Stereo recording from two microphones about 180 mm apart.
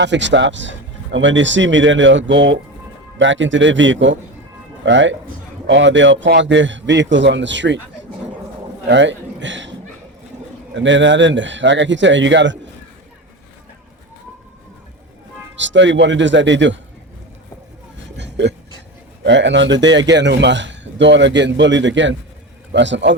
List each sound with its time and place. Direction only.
0.0 s a man's voice: 80° right
8.9 s a man's voice: 85° right
10.8 s a man's voice: 90° right
15.5 s a man's voice: 90° right
18.2 s a sound: 75° right (ahead or behind)
19.2 s a man's voice: 80° right